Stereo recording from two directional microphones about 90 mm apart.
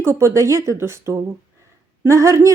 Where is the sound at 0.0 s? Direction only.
30° right (ahead or behind).